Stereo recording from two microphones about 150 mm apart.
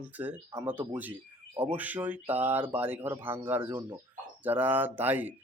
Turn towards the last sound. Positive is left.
turn(degrees=-10)  # may be behind; listen again after turning